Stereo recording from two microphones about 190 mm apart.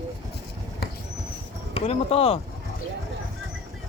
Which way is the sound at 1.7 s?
30° left (ahead or behind).